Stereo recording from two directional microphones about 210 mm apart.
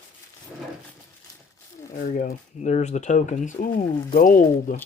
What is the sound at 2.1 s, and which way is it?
Speech, 35° left (ahead or behind).